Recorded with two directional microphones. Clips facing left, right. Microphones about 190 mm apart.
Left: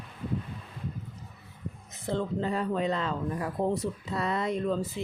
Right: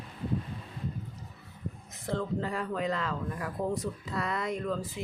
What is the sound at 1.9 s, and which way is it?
Speech, 25° left (ahead or behind).